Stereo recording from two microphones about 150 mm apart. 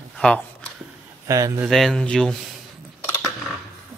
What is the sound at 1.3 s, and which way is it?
Speech, 25° right (ahead or behind).